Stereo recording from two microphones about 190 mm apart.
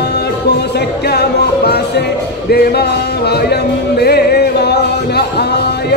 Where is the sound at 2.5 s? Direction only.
55° left (ahead or behind).